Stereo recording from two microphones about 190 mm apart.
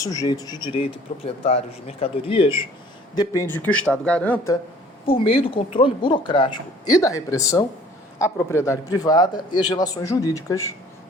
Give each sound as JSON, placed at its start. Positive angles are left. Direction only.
{"t": 0.0, "sound": "a man's voice", "side_deg": 15}
{"t": 3.2, "sound": "a man's voice", "side_deg": 15}
{"t": 5.0, "sound": "a man's voice", "side_deg": 30}